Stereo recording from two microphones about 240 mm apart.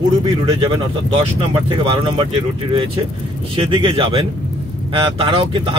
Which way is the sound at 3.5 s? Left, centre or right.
Right.